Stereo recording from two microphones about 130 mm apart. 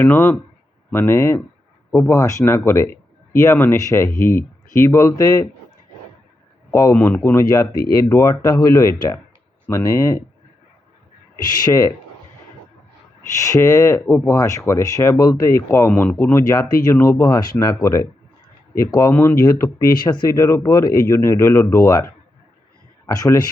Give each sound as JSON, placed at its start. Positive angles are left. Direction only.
{"t": 0.0, "sound": "speech", "side_deg": 15}
{"t": 6.7, "sound": "speech", "side_deg": 25}
{"t": 6.9, "sound": "speech", "side_deg": 15}
{"t": 11.6, "sound": "speech", "side_deg": 25}
{"t": 13.3, "sound": "speech", "side_deg": 25}
{"t": 15.9, "sound": "speech", "side_deg": 10}
{"t": 16.1, "sound": "speech", "side_deg": 20}
{"t": 20.1, "sound": "speech", "side_deg": 35}
{"t": 20.3, "sound": "speech", "side_deg": 20}